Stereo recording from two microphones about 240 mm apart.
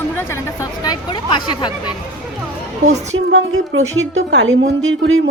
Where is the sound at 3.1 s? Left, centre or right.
Right.